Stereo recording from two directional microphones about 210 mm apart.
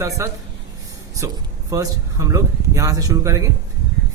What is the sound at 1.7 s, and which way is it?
Speech, 15° right (ahead or behind).